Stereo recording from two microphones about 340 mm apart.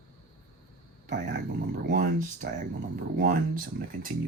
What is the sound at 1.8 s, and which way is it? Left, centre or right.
Speech, right.